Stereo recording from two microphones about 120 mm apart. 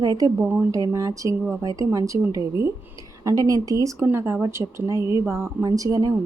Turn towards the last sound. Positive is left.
turn(degrees=-30)  # may be behind; listen again after turning